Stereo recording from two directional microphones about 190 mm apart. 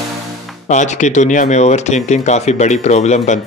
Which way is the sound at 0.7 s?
40° left (ahead or behind).